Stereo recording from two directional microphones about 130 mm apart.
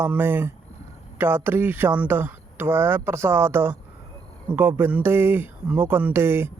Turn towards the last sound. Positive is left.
turn(degrees=-20)  # may be behind; listen again after turning